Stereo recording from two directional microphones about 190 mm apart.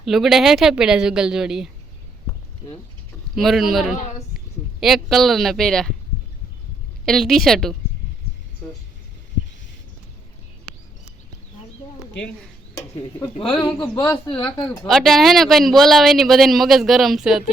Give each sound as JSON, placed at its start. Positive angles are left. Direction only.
{"t": 0.0, "sound": "speech", "side_deg": 0}
{"t": 3.3, "sound": "speech", "side_deg": 0}
{"t": 7.0, "sound": "speech", "side_deg": 0}
{"t": 12.7, "sound": "a sound", "side_deg": 15}
{"t": 13.3, "sound": "speech", "side_deg": 25}
{"t": 14.8, "sound": "speech", "side_deg": 0}